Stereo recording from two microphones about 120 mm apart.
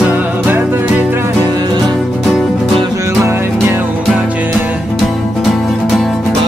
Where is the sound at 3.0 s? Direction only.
20° right (ahead or behind).